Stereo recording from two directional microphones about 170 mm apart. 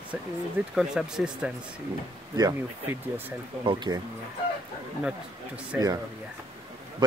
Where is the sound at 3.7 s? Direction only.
25° right (ahead or behind).